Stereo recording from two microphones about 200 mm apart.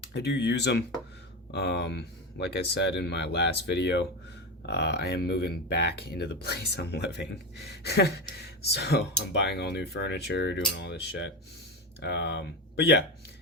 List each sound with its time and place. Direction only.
0.0 s speech: 55° left (ahead or behind)